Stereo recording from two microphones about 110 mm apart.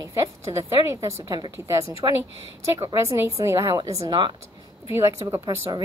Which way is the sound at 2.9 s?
25° right (ahead or behind).